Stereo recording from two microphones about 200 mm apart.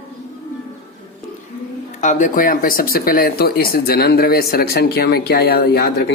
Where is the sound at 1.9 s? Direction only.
40° left (ahead or behind).